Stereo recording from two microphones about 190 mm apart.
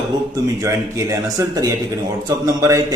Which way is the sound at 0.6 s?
15° right (ahead or behind).